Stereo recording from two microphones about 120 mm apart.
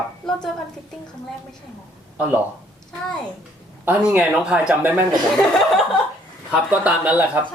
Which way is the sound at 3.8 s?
10° right (ahead or behind).